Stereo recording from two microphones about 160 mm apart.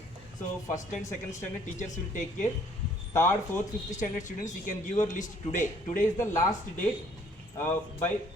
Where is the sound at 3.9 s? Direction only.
50° left (ahead or behind).